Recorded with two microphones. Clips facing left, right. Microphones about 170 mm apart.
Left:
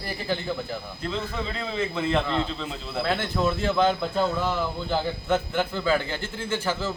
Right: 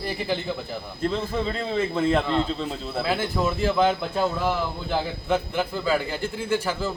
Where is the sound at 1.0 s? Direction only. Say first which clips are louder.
Right 6 dB; 35° right (ahead or behind).